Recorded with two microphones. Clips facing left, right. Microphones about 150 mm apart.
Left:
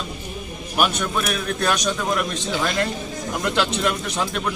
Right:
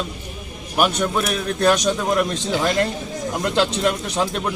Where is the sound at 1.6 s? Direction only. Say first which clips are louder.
Right 6 dB; 30° right (ahead or behind).